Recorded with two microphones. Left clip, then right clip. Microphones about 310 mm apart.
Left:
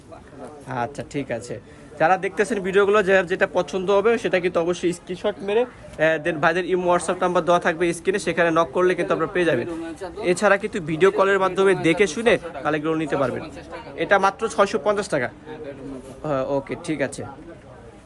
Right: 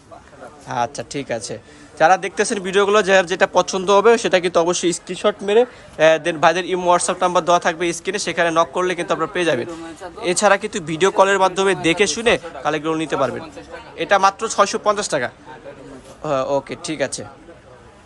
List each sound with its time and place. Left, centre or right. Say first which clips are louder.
0.7 s speech: right 5 dB; centre